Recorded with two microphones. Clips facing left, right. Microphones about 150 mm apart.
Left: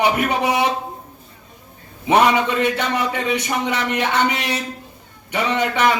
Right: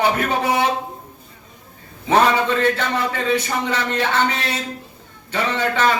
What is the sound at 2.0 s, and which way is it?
A man's voice, 15° left (ahead or behind).